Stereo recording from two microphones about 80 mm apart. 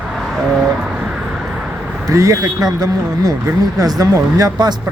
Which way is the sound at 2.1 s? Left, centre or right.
Right.